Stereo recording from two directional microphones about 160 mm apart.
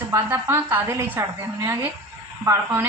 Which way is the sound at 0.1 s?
15° right (ahead or behind).